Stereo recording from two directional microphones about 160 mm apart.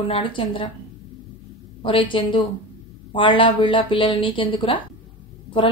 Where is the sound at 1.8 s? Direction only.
30° left (ahead or behind).